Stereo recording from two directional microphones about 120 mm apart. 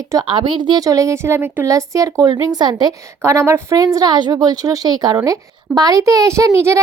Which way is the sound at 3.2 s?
20° right (ahead or behind).